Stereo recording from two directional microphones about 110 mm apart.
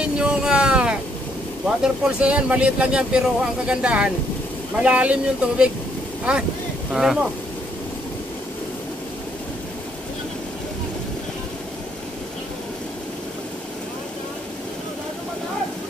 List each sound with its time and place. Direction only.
0.0 s a sound: 10° right (ahead or behind)
1.8 s speech: 10° right (ahead or behind)
6.9 s speech: 5° right (ahead or behind)